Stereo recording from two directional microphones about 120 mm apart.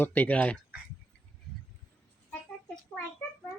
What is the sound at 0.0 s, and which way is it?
Speech, 15° left (ahead or behind).